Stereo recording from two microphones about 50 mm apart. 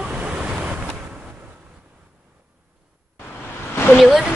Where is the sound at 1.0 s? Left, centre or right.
Right.